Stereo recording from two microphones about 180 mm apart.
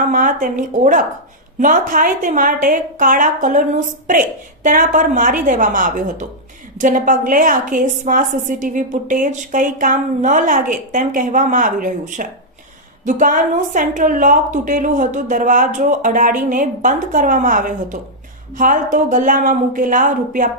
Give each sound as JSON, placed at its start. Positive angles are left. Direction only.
{"t": 0.1, "sound": "a woman's voice", "side_deg": -45}